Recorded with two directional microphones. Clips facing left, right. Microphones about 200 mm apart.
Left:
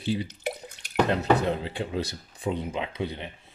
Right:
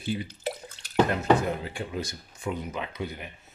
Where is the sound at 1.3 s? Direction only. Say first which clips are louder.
Left 1 dB; 30° left (ahead or behind).